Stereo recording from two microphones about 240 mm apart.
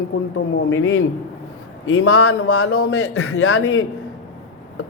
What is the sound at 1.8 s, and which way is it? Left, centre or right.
A man's voice, left.